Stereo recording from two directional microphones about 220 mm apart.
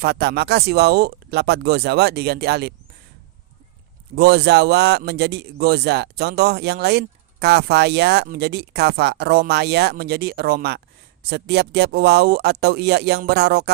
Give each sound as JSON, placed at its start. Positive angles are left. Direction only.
{"t": 0.0, "sound": "a man's voice", "side_deg": -50}
{"t": 4.1, "sound": "a man's voice", "side_deg": -45}